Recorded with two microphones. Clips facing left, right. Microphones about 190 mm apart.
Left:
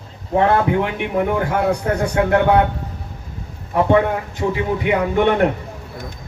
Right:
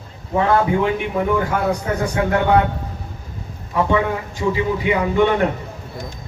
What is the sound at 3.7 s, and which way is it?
Speech, 55° left (ahead or behind).